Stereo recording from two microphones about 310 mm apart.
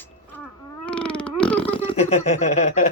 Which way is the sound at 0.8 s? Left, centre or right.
Centre.